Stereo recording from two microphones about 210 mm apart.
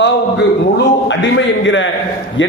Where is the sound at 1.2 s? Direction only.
60° left (ahead or behind).